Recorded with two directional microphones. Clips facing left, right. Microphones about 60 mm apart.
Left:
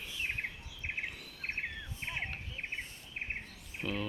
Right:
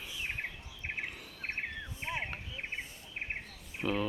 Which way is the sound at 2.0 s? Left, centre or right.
Centre.